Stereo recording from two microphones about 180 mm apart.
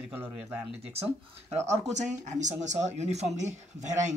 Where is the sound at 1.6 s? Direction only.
40° right (ahead or behind).